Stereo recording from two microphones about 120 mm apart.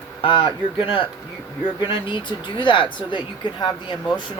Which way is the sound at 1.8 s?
45° left (ahead or behind).